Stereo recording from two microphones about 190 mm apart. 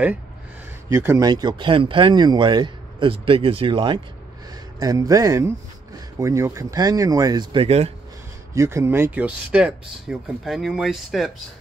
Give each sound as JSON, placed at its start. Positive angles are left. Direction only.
{"t": 0.8, "sound": "a man's voice", "side_deg": -15}
{"t": 8.5, "sound": "speech", "side_deg": -15}